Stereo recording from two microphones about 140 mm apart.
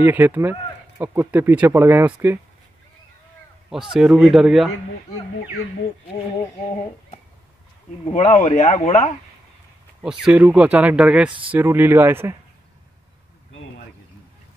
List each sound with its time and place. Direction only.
0.0 s speech: 15° right (ahead or behind)
3.9 s speech: 5° right (ahead or behind)
8.1 s speech: 60° left (ahead or behind)
10.0 s speech: 5° right (ahead or behind)